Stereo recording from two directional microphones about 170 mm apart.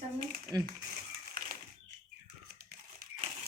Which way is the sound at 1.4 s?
60° right (ahead or behind).